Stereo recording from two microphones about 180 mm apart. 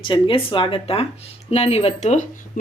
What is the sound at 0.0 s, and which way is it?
A woman's voice, 30° left (ahead or behind).